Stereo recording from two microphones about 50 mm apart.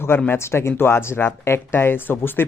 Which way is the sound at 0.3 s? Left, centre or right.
Left.